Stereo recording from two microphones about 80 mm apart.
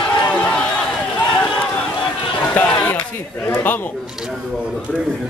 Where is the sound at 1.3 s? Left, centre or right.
Centre.